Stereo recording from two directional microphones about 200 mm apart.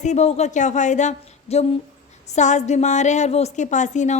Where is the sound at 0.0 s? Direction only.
35° left (ahead or behind).